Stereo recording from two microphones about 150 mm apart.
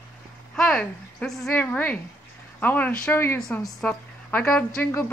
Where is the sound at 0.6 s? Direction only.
5° left (ahead or behind).